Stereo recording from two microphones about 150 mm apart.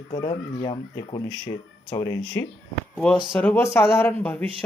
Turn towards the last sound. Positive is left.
turn(degrees=5)  # may be behind; listen again after turning